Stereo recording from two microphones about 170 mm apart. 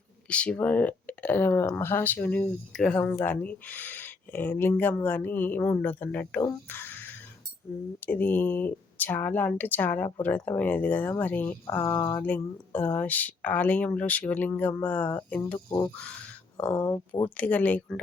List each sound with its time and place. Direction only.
0.3 s speech: 5° left (ahead or behind)
16.6 s speech: 5° left (ahead or behind)